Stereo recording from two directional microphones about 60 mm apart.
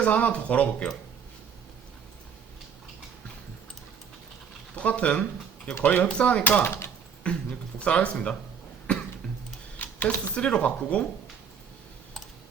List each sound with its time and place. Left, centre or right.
0.0 s speech: left
4.7 s speech: left
6.1 s speech: centre
8.9 s cough: centre
9.8 s a sound: left
10.3 s speech: left